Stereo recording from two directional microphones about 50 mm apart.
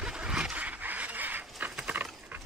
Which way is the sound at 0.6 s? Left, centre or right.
Right.